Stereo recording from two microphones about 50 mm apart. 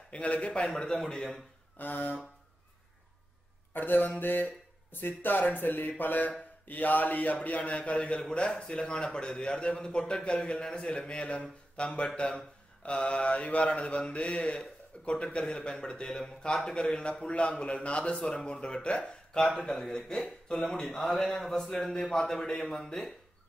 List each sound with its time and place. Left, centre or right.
0.1 s mantra: left
1.0 s speech: centre
1.8 s speech: left
3.7 s speech: left
6.7 s mantra: left
11.7 s speech: left
12.2 s mantra: centre
19.5 s speech: centre